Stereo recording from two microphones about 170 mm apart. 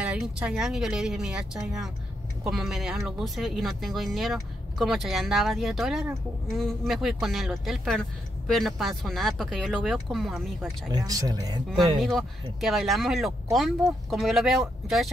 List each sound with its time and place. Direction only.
0.0 s speech: 5° right (ahead or behind)
10.9 s speech: 20° right (ahead or behind)
12.0 s speech: centre (ahead or behind)